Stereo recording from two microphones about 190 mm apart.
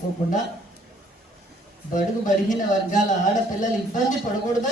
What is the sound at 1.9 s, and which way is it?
A man's voice, 45° left (ahead or behind).